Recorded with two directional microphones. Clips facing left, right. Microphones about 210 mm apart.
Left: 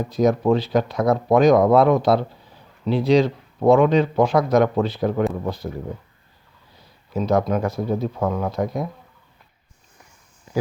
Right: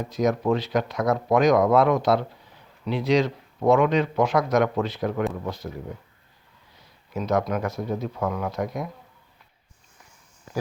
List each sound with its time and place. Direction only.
0.1 s a man's voice: 30° left (ahead or behind)